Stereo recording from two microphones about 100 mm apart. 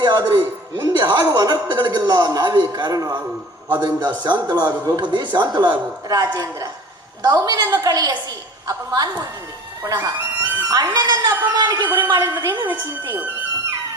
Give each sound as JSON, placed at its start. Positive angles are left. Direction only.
{"t": 0.0, "sound": "a man's voice", "side_deg": -40}
{"t": 10.7, "sound": "a woman's voice", "side_deg": -40}
{"t": 13.1, "sound": "music", "side_deg": -20}